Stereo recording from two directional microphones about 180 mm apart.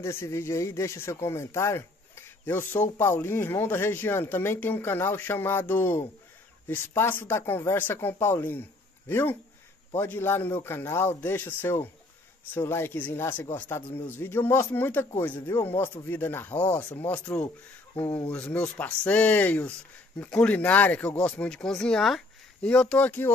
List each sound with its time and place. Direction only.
0.0 s speech: 15° left (ahead or behind)